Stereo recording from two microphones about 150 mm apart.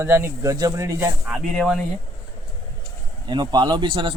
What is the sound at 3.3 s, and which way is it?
Speech, 30° right (ahead or behind).